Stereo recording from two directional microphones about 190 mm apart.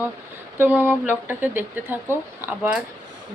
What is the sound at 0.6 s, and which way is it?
Speech, 10° right (ahead or behind).